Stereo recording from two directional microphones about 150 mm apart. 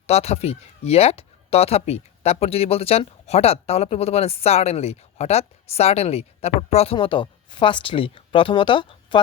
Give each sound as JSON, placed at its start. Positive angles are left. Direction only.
{"t": 0.1, "sound": "speech", "side_deg": 45}